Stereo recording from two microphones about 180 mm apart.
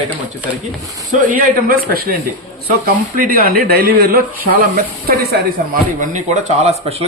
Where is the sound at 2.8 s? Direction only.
50° right (ahead or behind).